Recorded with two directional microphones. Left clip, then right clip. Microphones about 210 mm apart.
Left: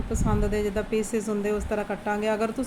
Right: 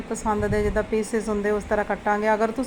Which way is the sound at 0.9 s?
20° left (ahead or behind).